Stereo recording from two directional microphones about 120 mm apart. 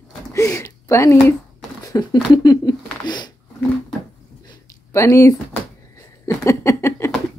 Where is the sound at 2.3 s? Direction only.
35° left (ahead or behind).